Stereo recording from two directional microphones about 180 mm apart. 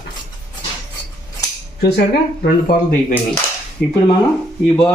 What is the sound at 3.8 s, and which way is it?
Speech, 60° left (ahead or behind).